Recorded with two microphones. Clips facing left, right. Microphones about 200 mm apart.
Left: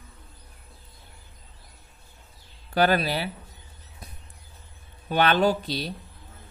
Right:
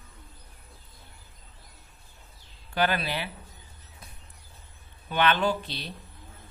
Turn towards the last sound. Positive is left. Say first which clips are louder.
# left 5 dB
turn(degrees=40)  # may be behind; listen again after turning